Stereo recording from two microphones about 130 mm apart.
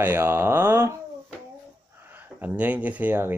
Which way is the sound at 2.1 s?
15° right (ahead or behind).